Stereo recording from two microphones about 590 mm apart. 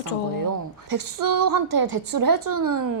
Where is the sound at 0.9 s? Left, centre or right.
Right.